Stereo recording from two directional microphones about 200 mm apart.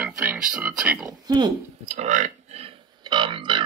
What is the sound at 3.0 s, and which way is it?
Music, 25° right (ahead or behind).